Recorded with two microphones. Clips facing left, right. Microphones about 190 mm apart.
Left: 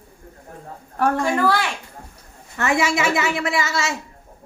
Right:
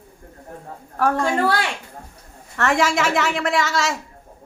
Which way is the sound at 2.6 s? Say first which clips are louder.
Right 1 dB; 5° left (ahead or behind).